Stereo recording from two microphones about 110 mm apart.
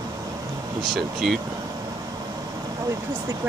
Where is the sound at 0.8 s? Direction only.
Centre (ahead or behind).